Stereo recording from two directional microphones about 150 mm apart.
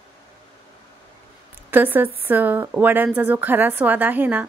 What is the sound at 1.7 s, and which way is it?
A woman's voice, 15° right (ahead or behind).